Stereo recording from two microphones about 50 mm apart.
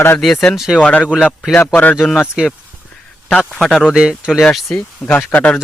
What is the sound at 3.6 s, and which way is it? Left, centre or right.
Speech, centre.